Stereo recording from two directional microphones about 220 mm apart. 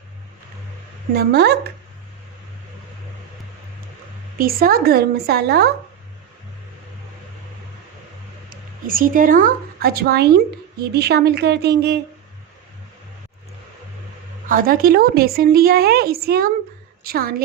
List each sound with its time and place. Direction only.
1.1 s a woman's voice: 45° right (ahead or behind)
4.4 s a woman's voice: 40° right (ahead or behind)
8.4 s a woman's voice: 40° right (ahead or behind)
14.4 s a woman's voice: 40° right (ahead or behind)